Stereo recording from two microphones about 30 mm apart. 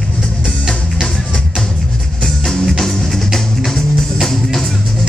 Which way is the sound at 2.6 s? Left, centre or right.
Centre.